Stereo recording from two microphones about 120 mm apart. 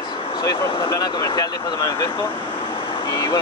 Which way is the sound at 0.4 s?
30° left (ahead or behind).